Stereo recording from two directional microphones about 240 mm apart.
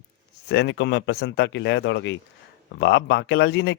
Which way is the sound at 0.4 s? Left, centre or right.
Left.